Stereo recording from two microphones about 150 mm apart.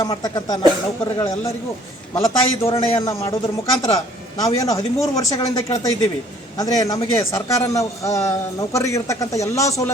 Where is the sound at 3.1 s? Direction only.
20° left (ahead or behind).